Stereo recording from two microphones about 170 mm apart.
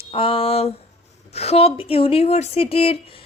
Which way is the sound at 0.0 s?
35° left (ahead or behind).